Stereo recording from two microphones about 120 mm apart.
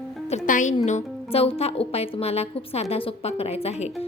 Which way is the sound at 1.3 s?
55° left (ahead or behind).